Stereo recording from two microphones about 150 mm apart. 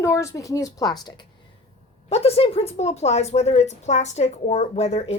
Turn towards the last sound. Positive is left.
turn(degrees=45)  # may be behind; listen again after turning